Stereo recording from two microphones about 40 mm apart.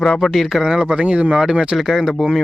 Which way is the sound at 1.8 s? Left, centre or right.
Centre.